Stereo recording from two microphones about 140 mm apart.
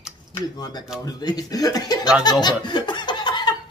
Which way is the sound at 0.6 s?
30° left (ahead or behind).